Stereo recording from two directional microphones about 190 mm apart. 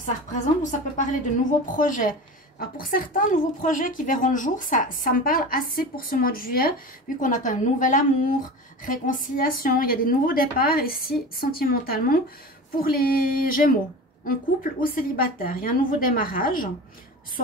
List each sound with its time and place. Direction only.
0.0 s a woman's voice: 40° left (ahead or behind)
14.8 s a woman's voice: 50° left (ahead or behind)